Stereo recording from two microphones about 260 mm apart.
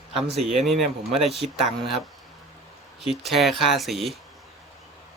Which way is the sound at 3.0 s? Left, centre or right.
Centre.